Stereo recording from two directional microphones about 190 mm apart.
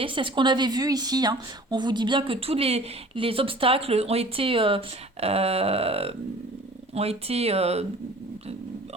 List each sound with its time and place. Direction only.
0.0 s a woman's voice: 25° right (ahead or behind)